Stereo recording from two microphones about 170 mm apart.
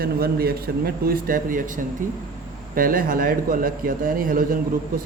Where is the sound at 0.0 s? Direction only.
60° right (ahead or behind).